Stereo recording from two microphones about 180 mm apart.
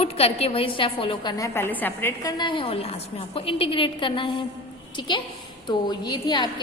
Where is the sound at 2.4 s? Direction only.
30° left (ahead or behind).